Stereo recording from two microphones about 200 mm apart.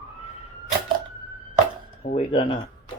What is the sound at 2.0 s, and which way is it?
Speech, 25° left (ahead or behind).